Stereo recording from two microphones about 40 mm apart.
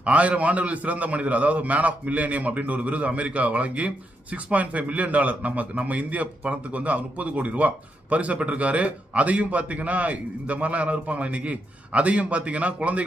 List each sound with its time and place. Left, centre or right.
0.0 s a man's voice: right